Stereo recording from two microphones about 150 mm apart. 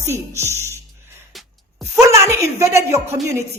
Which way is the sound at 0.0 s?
15° right (ahead or behind).